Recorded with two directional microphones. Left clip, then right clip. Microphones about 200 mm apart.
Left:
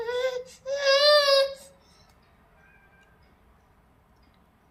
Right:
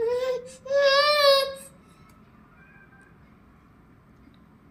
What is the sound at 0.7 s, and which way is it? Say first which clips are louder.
Baby cry: even; 10° left (ahead or behind).